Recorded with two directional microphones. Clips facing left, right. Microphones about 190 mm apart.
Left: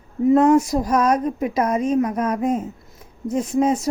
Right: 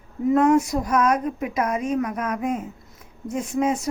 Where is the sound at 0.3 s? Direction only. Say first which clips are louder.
Left 2 dB; 30° left (ahead or behind).